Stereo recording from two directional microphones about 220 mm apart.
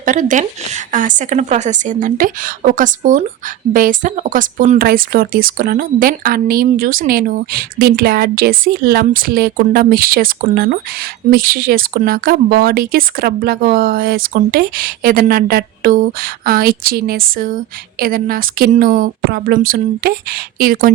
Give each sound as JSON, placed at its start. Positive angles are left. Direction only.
{"t": 0.0, "sound": "speech", "side_deg": -35}